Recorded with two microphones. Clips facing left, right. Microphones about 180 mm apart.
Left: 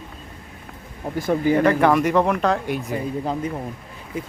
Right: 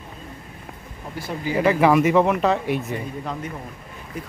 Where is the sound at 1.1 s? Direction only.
50° left (ahead or behind).